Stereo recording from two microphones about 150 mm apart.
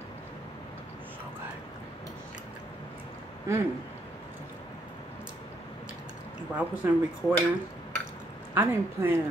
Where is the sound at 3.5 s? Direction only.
20° right (ahead or behind).